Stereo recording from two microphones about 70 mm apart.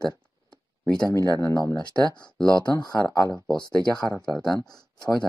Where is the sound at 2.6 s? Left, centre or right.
Left.